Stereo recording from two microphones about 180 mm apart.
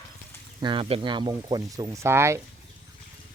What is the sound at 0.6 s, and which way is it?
Speech, 25° right (ahead or behind).